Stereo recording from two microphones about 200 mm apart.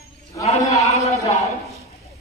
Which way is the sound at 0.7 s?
30° left (ahead or behind).